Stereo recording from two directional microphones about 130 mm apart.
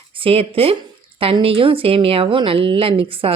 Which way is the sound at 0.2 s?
50° right (ahead or behind).